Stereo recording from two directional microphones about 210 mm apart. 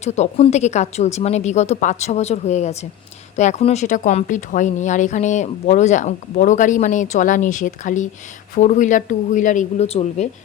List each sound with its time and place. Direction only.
0.0 s speech: 30° left (ahead or behind)